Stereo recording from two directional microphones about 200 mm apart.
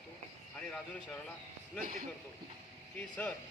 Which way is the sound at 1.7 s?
45° right (ahead or behind).